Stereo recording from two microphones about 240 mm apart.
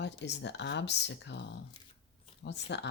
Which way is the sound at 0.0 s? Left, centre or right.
Left.